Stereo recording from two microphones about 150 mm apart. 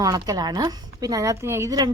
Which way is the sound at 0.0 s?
25° right (ahead or behind).